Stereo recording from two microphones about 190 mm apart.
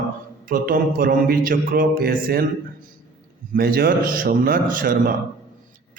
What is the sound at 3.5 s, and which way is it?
Mantra, 50° right (ahead or behind).